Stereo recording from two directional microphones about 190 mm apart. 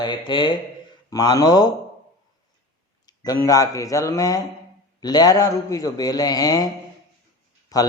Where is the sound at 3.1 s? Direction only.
20° left (ahead or behind).